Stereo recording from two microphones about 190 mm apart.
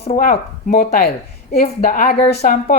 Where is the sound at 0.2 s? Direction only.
45° left (ahead or behind).